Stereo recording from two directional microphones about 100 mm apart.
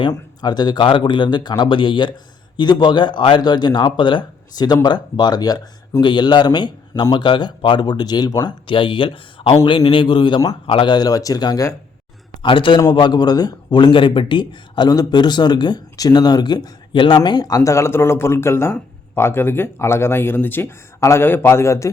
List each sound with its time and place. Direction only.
0.1 s speech: 45° left (ahead or behind)
8.6 s speech: 55° left (ahead or behind); by 11.6 s 40° left (ahead or behind)
12.4 s a man's voice: 55° left (ahead or behind); by 21.8 s 30° left (ahead or behind)